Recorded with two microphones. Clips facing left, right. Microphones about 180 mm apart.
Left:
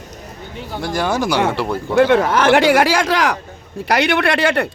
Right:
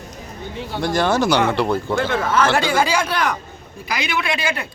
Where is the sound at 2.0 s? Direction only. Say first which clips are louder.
Left 10 dB; 65° left (ahead or behind); by 3.3 s 90° left.